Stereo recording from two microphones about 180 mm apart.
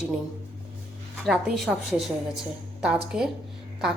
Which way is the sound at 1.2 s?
Centre (ahead or behind).